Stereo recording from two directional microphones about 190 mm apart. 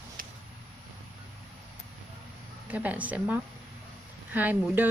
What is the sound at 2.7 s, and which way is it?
Speech, 10° right (ahead or behind).